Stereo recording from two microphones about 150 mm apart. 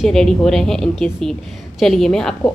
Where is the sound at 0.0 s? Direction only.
5° left (ahead or behind).